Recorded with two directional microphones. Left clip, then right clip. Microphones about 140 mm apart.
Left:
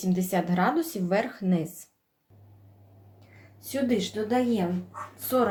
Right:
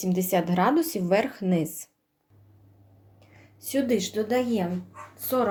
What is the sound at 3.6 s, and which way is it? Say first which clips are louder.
Speech: right 2 dB; 60° right (ahead or behind).